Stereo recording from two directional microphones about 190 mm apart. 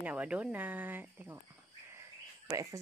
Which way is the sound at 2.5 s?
15° right (ahead or behind).